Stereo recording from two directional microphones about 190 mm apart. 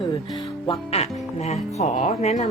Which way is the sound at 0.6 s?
30° left (ahead or behind).